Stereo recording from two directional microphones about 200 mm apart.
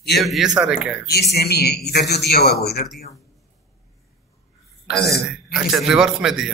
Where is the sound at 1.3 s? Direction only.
50° left (ahead or behind).